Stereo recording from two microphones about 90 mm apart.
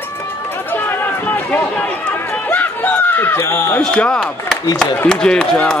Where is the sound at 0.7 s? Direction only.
25° left (ahead or behind).